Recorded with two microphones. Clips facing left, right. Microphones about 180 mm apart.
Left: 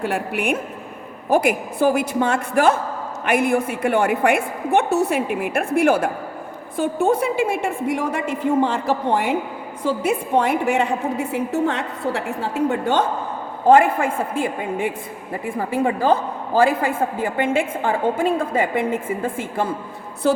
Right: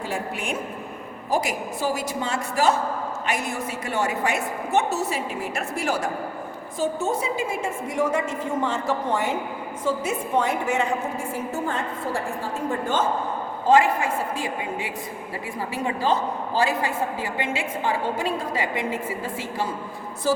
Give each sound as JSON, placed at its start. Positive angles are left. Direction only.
{"t": 0.0, "sound": "a woman's voice", "side_deg": 60}
{"t": 13.7, "sound": "a woman's voice", "side_deg": 55}